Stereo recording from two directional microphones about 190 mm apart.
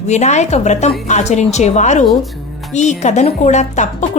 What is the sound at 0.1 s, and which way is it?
A woman's voice, 35° left (ahead or behind).